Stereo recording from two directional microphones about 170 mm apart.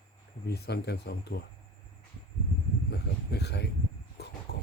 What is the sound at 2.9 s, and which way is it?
Speech, 75° left (ahead or behind).